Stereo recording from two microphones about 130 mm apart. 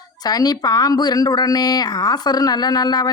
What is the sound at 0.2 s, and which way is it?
Speech, 30° left (ahead or behind).